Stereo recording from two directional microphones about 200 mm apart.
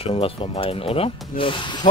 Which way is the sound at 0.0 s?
25° left (ahead or behind).